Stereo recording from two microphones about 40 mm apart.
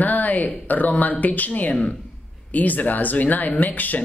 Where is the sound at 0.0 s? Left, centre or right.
Left.